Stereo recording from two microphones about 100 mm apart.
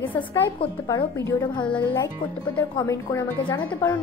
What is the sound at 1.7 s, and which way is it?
Speech, 15° left (ahead or behind).